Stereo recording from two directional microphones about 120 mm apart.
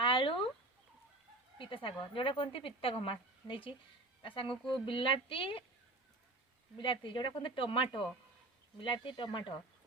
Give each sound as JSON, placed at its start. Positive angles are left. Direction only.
{"t": 0.0, "sound": "fowl", "side_deg": 45}
{"t": 1.5, "sound": "speech", "side_deg": 45}
{"t": 6.7, "sound": "speech", "side_deg": 45}